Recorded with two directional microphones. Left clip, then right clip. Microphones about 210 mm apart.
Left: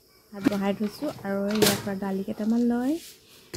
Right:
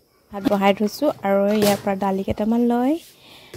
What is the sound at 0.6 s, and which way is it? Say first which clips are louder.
Speech: right 11 dB; 40° right (ahead or behind).